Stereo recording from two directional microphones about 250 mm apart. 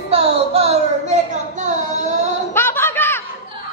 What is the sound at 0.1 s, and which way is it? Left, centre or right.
Child singing, right.